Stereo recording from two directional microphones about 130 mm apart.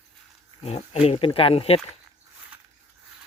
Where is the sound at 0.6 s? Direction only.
55° left (ahead or behind).